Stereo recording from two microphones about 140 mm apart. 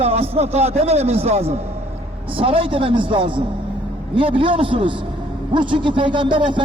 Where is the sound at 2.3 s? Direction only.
40° right (ahead or behind).